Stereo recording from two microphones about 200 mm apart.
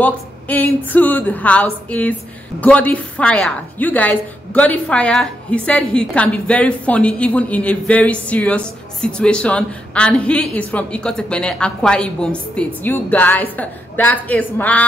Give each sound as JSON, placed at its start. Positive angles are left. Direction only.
{"t": 0.0, "sound": "a woman's voice", "side_deg": 10}